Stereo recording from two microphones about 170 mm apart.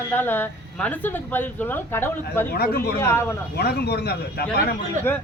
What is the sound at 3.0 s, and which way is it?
Speech, 15° left (ahead or behind).